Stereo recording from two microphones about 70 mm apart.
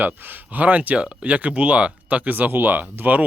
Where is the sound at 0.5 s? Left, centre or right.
Right.